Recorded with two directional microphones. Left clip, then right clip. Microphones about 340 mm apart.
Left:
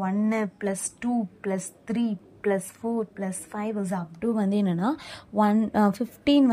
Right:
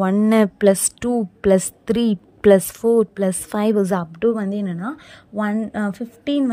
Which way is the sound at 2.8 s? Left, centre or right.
Right.